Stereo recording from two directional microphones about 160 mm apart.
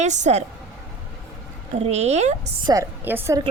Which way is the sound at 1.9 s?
45° right (ahead or behind).